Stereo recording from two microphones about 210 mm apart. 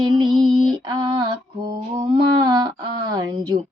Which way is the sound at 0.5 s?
20° right (ahead or behind).